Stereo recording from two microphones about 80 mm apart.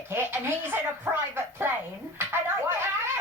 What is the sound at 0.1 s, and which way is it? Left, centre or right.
Speech, right.